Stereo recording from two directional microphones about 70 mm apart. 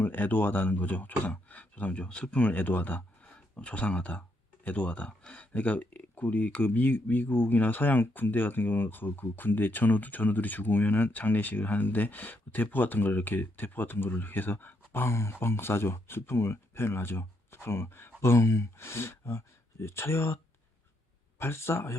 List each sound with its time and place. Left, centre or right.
0.0 s speech: left